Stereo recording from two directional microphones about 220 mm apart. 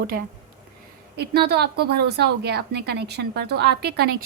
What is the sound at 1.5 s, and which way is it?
A woman's voice, 45° right (ahead or behind).